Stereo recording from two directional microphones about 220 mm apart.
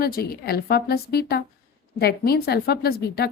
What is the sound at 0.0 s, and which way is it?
A woman's voice, 45° left (ahead or behind).